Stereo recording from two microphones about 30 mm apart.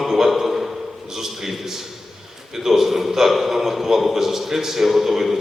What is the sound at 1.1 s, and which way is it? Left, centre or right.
A man's voice, centre.